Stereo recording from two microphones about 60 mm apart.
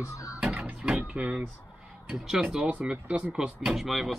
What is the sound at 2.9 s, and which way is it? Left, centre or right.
Speech, right.